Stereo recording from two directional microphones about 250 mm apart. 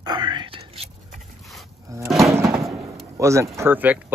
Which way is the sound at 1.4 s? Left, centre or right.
Centre.